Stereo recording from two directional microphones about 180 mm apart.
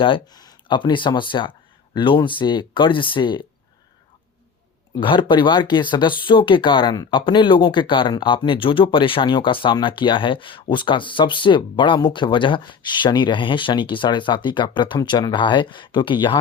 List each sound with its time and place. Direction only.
0.0 s speech: 25° left (ahead or behind)
4.9 s speech: 25° left (ahead or behind)